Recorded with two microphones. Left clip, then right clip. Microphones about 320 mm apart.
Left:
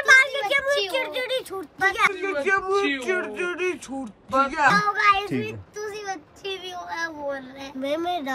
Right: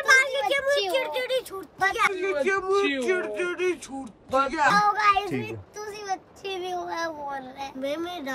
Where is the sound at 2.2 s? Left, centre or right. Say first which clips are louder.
Left 2 dB; centre.